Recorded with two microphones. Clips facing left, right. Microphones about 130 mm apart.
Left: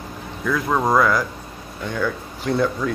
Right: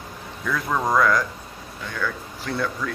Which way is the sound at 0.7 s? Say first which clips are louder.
Left 3 dB; 20° left (ahead or behind).